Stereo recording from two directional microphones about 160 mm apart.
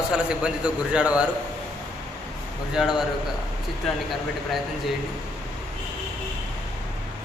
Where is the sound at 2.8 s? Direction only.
5° right (ahead or behind).